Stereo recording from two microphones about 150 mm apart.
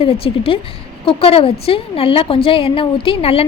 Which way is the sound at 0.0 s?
40° left (ahead or behind).